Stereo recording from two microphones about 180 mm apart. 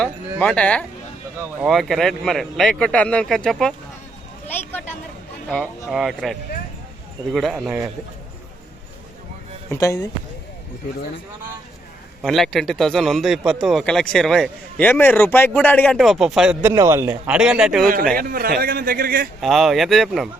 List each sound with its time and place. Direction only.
0.0 s a man's voice: 5° left (ahead or behind)
4.4 s a sound: 10° left (ahead or behind)
5.5 s a man's voice: centre (ahead or behind)
9.6 s speech: 20° left (ahead or behind)
12.2 s a man's voice: centre (ahead or behind)
16.0 s a man's voice: centre (ahead or behind)
16.7 s a man's voice: 15° right (ahead or behind)
18.1 s a man's voice: 55° right (ahead or behind)
19.4 s a man's voice: centre (ahead or behind)